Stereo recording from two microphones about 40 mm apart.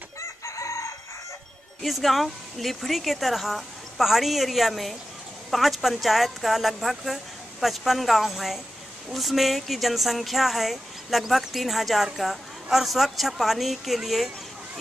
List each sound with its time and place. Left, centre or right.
1.8 s speech: centre